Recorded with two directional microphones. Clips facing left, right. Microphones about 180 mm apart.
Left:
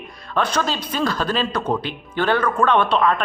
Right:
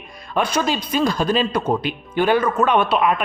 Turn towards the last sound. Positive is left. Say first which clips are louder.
# even
turn(degrees=-10)  # may be behind; listen again after turning